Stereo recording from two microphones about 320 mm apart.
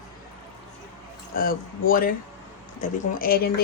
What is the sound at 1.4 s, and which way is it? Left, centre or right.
Speech, left.